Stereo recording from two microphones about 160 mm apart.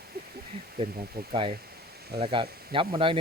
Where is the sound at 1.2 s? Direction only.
75° right (ahead or behind).